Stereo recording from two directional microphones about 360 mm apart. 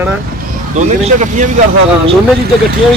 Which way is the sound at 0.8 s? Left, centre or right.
Centre.